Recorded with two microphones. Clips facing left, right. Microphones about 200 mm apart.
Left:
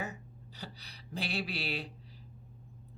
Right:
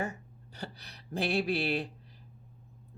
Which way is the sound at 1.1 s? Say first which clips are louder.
Right 8 dB; 50° right (ahead or behind).